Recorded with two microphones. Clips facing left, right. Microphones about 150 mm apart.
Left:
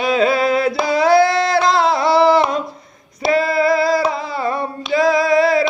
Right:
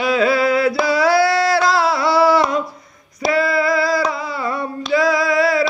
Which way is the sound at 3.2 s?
25° left (ahead or behind).